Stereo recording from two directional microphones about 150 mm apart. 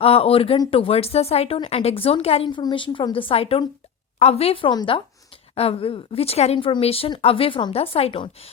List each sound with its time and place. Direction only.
0.0 s speech: 40° left (ahead or behind)